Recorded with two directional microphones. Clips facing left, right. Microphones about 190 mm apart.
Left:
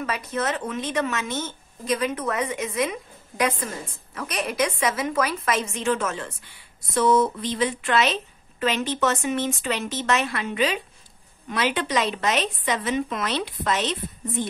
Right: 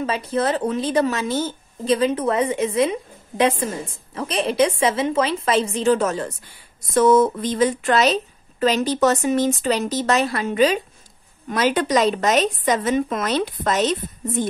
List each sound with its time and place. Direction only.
0.0 s a woman's voice: 30° right (ahead or behind)